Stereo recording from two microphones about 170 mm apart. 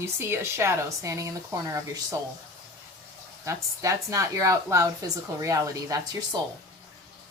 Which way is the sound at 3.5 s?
20° right (ahead or behind).